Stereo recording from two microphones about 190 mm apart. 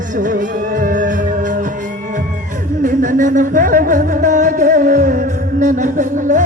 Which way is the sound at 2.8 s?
45° right (ahead or behind).